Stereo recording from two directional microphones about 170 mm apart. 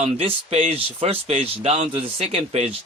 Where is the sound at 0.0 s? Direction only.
35° right (ahead or behind).